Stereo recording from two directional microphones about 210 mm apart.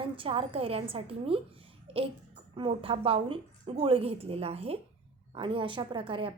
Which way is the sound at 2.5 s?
25° right (ahead or behind).